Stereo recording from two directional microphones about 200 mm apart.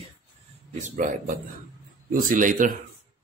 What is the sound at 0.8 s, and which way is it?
A man's voice, 40° right (ahead or behind).